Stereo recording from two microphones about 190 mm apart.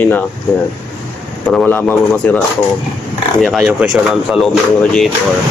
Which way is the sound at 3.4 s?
5° right (ahead or behind).